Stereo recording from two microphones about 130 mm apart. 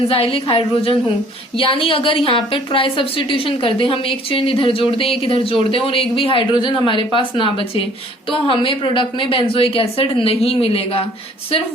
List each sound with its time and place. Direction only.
0.1 s a woman's voice: 45° left (ahead or behind)